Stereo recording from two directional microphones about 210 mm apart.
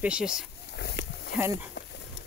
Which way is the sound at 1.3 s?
10° right (ahead or behind).